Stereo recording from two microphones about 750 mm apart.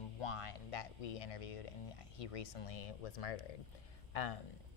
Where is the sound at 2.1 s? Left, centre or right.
Left.